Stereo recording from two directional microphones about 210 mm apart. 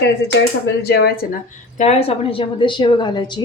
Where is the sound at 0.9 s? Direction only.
50° left (ahead or behind).